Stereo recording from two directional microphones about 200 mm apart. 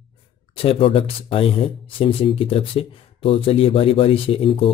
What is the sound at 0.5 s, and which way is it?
A man's voice, 30° left (ahead or behind).